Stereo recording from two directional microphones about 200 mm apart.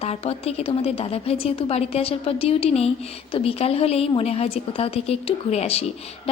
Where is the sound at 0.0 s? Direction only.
30° left (ahead or behind).